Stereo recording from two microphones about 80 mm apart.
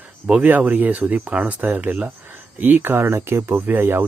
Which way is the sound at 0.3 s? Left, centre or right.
Centre.